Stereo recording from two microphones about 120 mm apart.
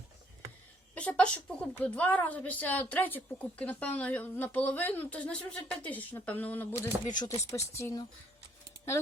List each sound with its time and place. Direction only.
0.9 s a woman's voice: 10° left (ahead or behind)
7.1 s speech: 30° left (ahead or behind)